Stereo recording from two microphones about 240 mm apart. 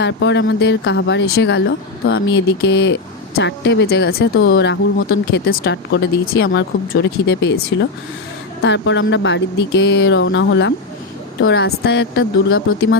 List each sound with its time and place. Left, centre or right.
0.0 s speech: left
8.6 s speech: left